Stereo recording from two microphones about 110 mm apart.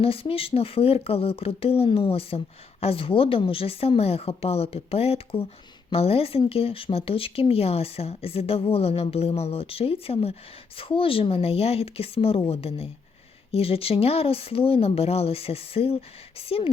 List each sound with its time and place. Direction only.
0.0 s speech: 60° left (ahead or behind)